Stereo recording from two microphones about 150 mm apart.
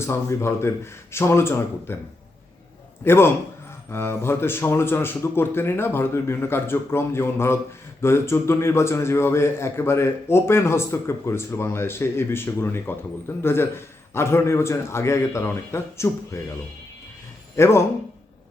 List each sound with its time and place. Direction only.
0.0 s a man's voice: 20° left (ahead or behind)
3.0 s a man's voice: 15° left (ahead or behind)
17.6 s a man's voice: 15° left (ahead or behind)